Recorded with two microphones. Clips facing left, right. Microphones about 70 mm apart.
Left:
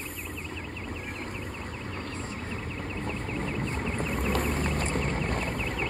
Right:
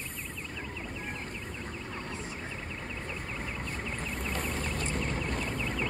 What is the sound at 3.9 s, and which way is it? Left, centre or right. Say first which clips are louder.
Vehicle: left 6 dB; left.